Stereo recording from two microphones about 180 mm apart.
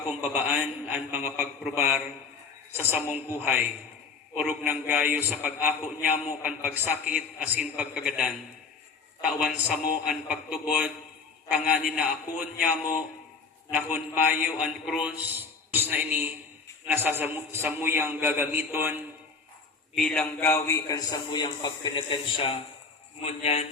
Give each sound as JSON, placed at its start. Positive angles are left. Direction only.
{"t": 0.1, "sound": "a man's voice", "side_deg": -10}
{"t": 20.0, "sound": "a man's voice", "side_deg": 5}